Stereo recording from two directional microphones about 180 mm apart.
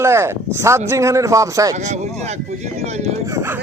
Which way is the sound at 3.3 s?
15° right (ahead or behind).